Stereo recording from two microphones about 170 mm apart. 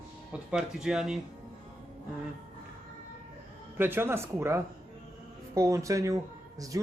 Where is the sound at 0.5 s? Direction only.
5° right (ahead or behind).